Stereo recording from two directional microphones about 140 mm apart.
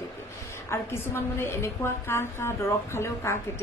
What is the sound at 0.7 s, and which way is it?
A woman's voice, 20° left (ahead or behind).